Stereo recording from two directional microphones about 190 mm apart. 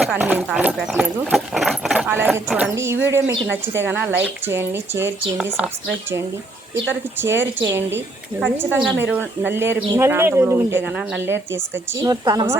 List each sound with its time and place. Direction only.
0.0 s a woman's voice: 5° right (ahead or behind)